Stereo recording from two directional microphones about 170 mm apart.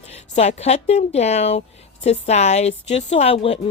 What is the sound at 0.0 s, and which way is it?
A woman's voice, 40° left (ahead or behind).